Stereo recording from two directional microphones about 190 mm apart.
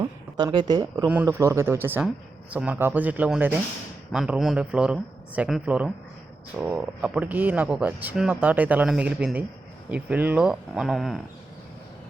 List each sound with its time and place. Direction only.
0.0 s a sound: 20° right (ahead or behind)
0.7 s speech: 20° right (ahead or behind)
1.0 s speech: 10° right (ahead or behind)